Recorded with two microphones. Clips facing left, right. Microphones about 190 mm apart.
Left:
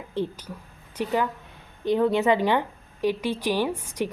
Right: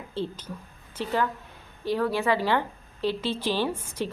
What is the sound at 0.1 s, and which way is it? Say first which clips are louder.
A woman's voice: left 3 dB; 15° left (ahead or behind).